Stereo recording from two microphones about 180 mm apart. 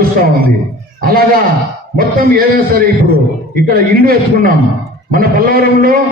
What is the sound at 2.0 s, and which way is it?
A man's voice, 55° right (ahead or behind).